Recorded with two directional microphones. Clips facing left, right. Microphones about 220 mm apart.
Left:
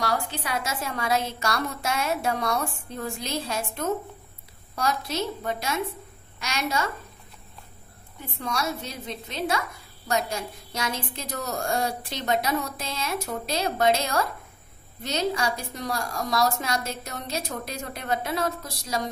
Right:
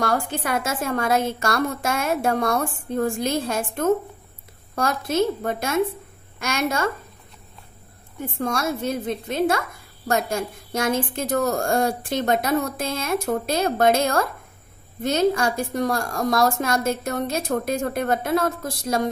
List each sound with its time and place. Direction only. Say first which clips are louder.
0.0 s a woman's voice: right 5 dB; 50° right (ahead or behind)
8.2 s a woman's voice: right 5 dB; 50° right (ahead or behind)